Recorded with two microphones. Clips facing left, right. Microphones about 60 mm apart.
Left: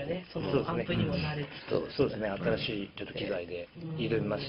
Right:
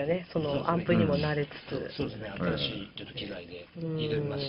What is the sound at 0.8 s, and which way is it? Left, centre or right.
Speech, right.